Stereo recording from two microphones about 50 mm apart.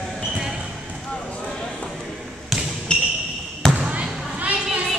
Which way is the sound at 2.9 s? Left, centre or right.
Centre.